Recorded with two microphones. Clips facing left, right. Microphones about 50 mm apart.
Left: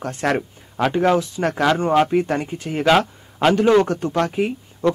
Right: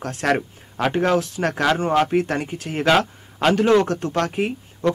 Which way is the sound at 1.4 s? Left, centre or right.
Centre.